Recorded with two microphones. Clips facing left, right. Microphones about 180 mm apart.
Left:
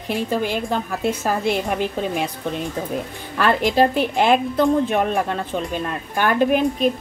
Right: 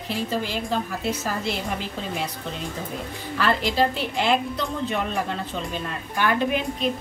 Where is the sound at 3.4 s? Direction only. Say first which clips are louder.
Left 5 dB; 50° left (ahead or behind).